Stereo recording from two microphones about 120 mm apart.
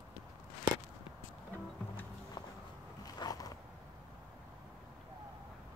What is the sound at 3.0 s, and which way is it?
Biting, 30° left (ahead or behind).